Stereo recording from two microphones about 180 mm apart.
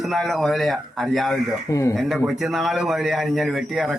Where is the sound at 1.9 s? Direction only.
Centre (ahead or behind).